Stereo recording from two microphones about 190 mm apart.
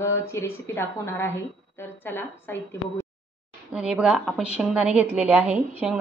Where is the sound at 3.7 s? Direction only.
5° right (ahead or behind).